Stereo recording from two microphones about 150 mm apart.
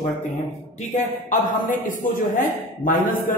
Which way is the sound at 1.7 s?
60° left (ahead or behind).